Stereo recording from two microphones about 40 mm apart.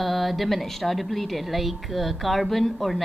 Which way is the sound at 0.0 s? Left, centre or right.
Centre.